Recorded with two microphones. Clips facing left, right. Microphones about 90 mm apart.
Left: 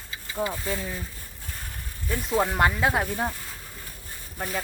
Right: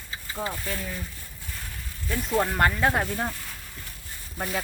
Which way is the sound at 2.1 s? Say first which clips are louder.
Left 1 dB; 5° left (ahead or behind).